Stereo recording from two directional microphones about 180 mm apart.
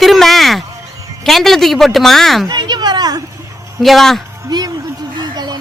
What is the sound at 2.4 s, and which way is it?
Speech, 25° right (ahead or behind).